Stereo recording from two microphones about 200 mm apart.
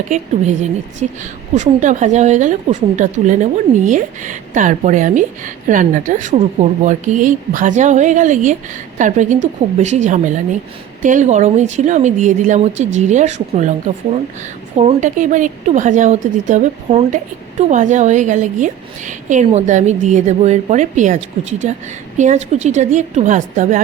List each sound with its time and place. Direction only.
0.1 s a woman's voice: 35° right (ahead or behind)